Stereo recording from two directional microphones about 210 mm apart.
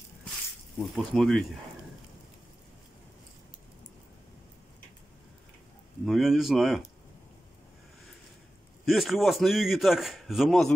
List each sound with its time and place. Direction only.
0.7 s a man's voice: centre (ahead or behind)
6.0 s a man's voice: centre (ahead or behind)
8.8 s a man's voice: centre (ahead or behind)